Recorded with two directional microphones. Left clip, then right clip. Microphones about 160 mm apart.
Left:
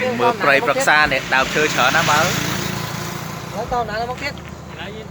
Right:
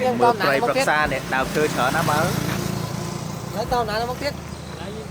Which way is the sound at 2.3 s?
10° right (ahead or behind).